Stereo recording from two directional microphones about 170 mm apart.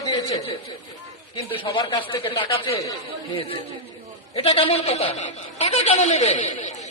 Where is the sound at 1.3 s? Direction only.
30° left (ahead or behind).